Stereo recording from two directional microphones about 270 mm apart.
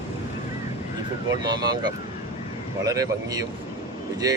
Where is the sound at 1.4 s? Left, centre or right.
Centre.